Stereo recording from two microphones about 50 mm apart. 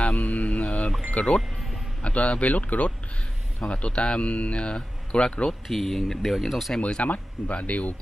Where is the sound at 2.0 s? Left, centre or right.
Left.